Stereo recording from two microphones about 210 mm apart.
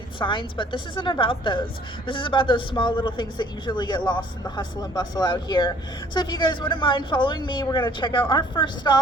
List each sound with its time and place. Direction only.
0.2 s a man's voice: 25° left (ahead or behind)